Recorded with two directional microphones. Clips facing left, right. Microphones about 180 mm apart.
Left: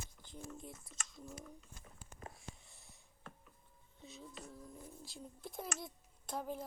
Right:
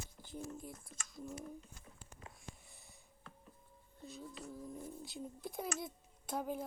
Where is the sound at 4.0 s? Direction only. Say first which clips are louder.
Right 3 dB; centre (ahead or behind).